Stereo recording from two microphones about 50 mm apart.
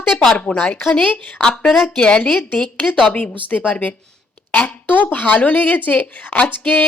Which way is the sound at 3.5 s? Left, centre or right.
Left.